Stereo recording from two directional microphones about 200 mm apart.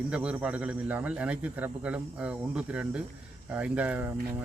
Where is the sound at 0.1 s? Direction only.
5° right (ahead or behind).